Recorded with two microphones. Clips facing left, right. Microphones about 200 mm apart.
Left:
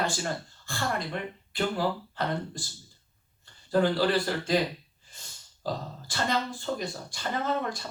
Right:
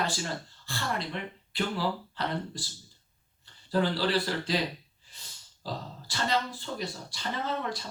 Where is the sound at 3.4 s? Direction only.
50° left (ahead or behind).